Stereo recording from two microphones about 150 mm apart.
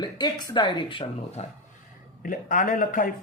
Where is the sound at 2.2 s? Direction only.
65° left (ahead or behind).